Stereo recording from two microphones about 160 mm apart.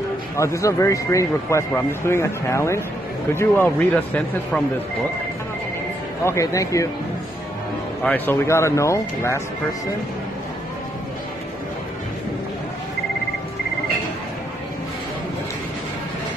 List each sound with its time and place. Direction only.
0.4 s speech: 20° left (ahead or behind)
6.2 s speech: 20° left (ahead or behind)
8.0 s speech: 10° left (ahead or behind)